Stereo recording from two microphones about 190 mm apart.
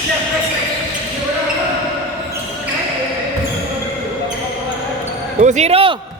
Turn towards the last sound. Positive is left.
turn(degrees=-30)  # may be behind; listen again after turning